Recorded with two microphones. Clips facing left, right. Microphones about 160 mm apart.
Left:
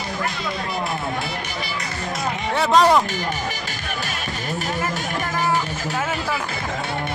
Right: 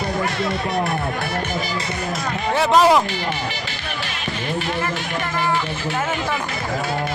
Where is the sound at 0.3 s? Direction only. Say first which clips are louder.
Right 5 dB; 70° right (ahead or behind).